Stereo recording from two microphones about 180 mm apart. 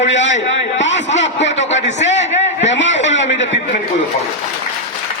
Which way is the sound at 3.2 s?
90° left.